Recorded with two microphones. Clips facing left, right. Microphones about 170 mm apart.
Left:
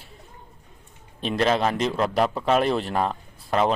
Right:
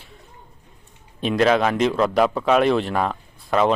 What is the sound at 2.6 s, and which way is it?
Speech, 35° left (ahead or behind).